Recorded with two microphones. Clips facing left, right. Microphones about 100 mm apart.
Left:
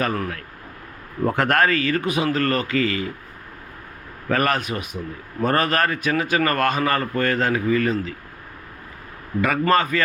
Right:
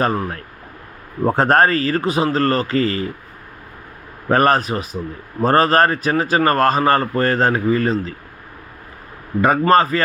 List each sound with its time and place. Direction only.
0.0 s speech: 30° right (ahead or behind)
4.3 s speech: 35° right (ahead or behind)
9.4 s speech: 35° right (ahead or behind)